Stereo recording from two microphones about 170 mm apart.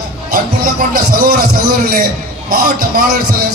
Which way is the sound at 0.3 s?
60° right (ahead or behind).